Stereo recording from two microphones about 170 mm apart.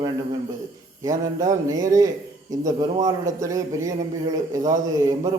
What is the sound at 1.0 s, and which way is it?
A man's voice, 20° right (ahead or behind).